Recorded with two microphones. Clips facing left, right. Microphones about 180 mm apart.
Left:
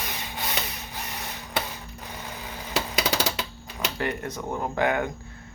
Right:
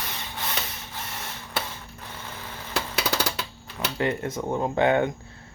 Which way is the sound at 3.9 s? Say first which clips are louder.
Right 5 dB; 25° right (ahead or behind).